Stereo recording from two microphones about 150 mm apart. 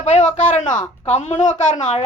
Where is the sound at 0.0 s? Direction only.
50° left (ahead or behind).